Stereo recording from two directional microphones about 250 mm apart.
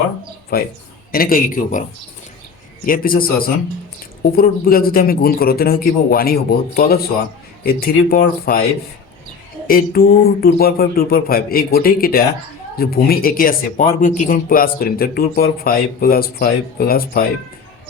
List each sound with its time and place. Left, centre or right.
0.5 s speech: left
2.8 s speech: left
9.6 s speech: left